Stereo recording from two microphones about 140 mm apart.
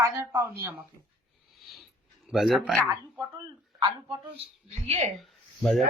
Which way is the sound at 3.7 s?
35° right (ahead or behind).